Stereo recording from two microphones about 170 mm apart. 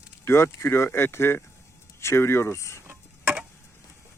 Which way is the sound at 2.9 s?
10° right (ahead or behind).